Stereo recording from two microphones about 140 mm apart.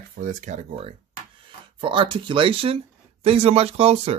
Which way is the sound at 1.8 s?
35° right (ahead or behind).